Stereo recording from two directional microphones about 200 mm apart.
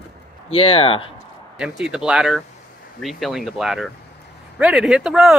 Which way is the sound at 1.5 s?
5° right (ahead or behind).